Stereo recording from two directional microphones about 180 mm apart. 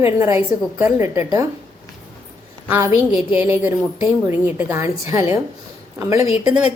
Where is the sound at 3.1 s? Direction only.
10° right (ahead or behind).